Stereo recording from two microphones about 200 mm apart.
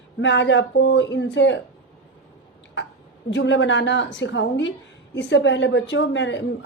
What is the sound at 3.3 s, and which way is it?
Speech, 65° left (ahead or behind).